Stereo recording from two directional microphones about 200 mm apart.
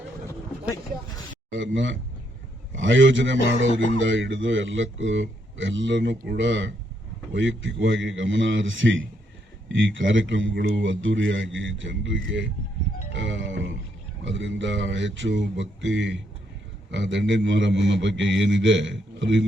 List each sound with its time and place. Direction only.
1.5 s a man's voice: 70° right (ahead or behind)